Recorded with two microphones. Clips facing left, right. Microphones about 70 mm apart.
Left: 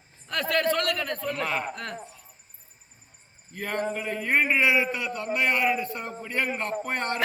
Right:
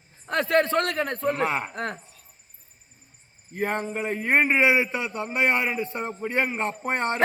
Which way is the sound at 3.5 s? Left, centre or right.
Right.